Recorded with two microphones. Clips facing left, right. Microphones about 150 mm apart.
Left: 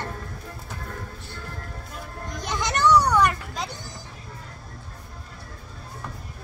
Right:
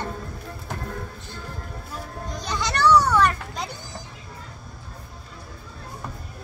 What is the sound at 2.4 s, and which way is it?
Children playing, 20° left (ahead or behind).